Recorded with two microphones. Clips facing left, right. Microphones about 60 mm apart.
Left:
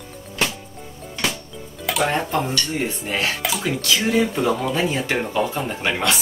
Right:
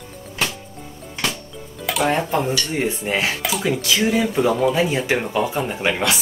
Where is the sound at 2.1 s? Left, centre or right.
Centre.